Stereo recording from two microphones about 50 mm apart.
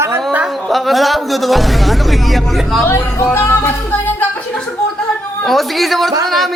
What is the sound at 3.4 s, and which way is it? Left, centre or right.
Music, left.